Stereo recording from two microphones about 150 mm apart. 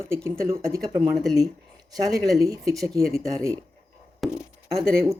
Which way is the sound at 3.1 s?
20° right (ahead or behind).